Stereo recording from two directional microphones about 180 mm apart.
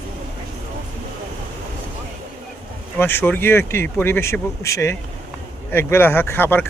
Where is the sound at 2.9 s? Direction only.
10° left (ahead or behind).